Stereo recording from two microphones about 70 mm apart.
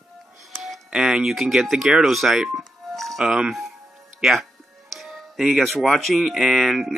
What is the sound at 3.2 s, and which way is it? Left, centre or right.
Speech, centre.